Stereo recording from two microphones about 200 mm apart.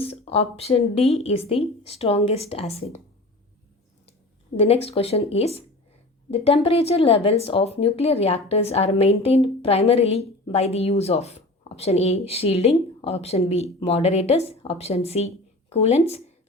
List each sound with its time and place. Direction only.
0.0 s a woman's voice: 30° left (ahead or behind)
4.5 s a woman's voice: 30° left (ahead or behind)